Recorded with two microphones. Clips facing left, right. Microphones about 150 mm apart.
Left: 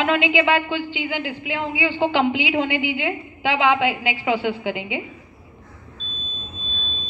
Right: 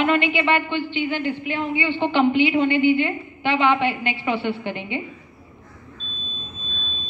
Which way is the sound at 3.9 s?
90° left.